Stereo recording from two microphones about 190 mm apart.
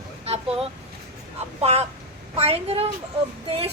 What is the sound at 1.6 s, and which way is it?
A woman's voice, 35° right (ahead or behind).